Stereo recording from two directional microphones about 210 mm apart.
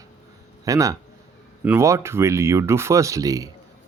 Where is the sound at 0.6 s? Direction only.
15° right (ahead or behind).